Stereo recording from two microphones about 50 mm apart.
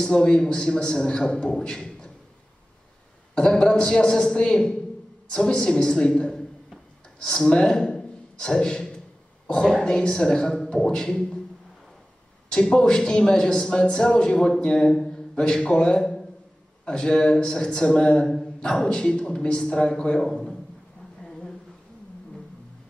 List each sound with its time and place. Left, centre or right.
0.0 s a man's voice: centre
3.3 s a man's voice: centre
12.4 s a man's voice: centre
16.0 s a sound: centre
16.8 s a man's voice: centre
21.2 s a sound: centre